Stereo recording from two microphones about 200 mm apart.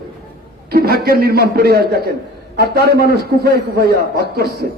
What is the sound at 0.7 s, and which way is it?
A man's voice, 50° right (ahead or behind).